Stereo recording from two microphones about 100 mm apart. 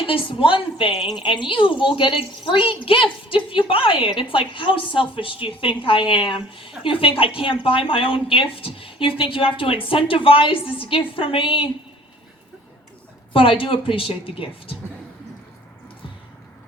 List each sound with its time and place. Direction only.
0.0 s a woman's voice: 60° left (ahead or behind)
13.3 s a woman's voice: 60° left (ahead or behind)